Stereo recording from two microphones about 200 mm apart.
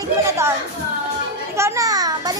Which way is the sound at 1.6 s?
15° right (ahead or behind).